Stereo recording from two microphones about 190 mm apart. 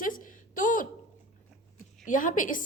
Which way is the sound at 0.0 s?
45° left (ahead or behind).